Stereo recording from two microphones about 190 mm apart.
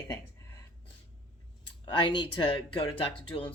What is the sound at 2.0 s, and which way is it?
Speech, 25° left (ahead or behind).